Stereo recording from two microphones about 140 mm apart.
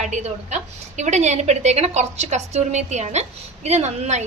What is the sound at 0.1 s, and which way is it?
A woman's voice, 60° right (ahead or behind).